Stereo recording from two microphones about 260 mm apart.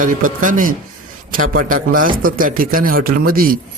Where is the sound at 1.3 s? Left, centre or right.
Right.